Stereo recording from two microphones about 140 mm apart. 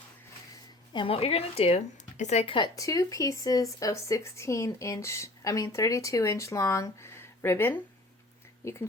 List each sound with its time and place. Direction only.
0.9 s speech: 40° left (ahead or behind)
2.7 s speech: 25° left (ahead or behind)